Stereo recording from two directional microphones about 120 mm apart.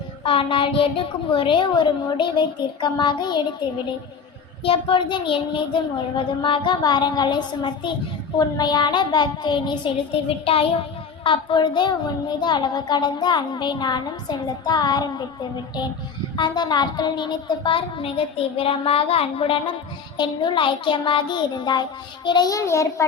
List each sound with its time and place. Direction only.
0.3 s a woman's voice: 45° left (ahead or behind)
16.4 s a woman's voice: 35° left (ahead or behind); by 19.5 s 55° left (ahead or behind)
20.1 s a woman's voice: 40° left (ahead or behind); by 23.0 s 25° left (ahead or behind)